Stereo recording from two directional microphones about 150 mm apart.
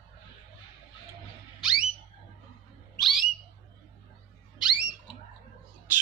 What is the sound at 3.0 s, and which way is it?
Bird, centre (ahead or behind).